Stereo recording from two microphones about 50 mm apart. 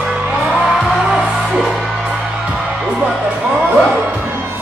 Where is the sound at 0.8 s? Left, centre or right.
Centre.